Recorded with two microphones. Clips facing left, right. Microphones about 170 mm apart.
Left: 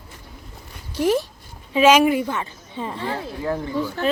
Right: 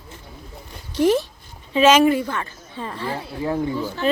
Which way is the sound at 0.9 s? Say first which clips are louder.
Right 2 dB; 5° left (ahead or behind).